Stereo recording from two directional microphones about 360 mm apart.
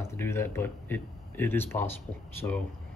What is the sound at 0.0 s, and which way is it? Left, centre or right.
Speech, centre.